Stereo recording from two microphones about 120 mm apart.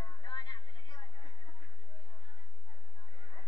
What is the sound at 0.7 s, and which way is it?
Chatter, 35° left (ahead or behind).